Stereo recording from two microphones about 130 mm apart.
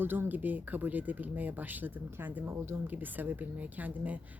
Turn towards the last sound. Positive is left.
turn(degrees=-10)  # may be behind; listen again after turning